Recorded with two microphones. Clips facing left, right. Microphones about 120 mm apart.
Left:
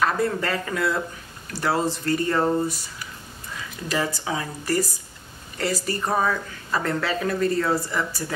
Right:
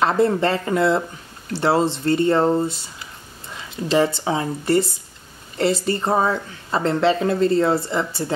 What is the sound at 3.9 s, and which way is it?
A woman's voice, 25° right (ahead or behind).